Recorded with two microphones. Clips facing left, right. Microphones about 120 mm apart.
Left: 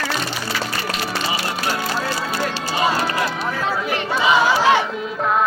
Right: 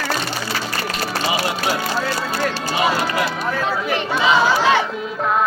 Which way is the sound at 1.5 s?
Centre (ahead or behind).